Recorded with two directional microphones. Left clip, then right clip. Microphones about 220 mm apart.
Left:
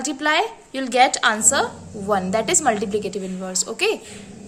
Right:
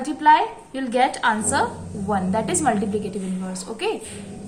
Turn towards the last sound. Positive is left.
turn(degrees=50)  # may be behind; listen again after turning